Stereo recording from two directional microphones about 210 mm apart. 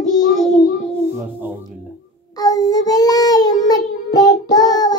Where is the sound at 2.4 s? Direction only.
15° left (ahead or behind).